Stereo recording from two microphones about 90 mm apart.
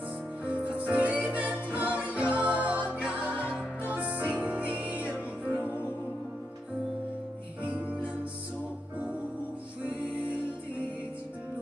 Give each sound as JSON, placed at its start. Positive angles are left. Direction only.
{"t": 0.5, "sound": "music", "side_deg": -15}
{"t": 7.6, "sound": "music", "side_deg": -15}